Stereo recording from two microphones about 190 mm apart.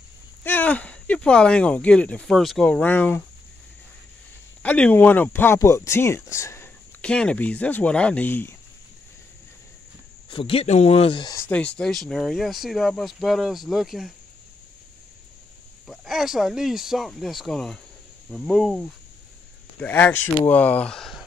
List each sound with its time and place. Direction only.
0.4 s speech: 10° left (ahead or behind)
4.6 s speech: 5° left (ahead or behind)
10.3 s speech: 30° left (ahead or behind)
11.3 s speech: 10° left (ahead or behind)
15.9 s speech: centre (ahead or behind)